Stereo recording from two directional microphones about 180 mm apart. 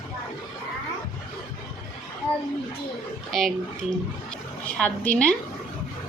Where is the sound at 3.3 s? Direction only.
Centre (ahead or behind).